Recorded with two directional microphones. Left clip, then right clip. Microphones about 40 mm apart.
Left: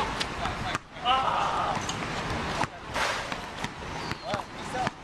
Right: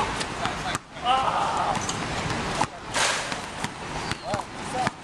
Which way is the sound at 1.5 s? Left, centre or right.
Left.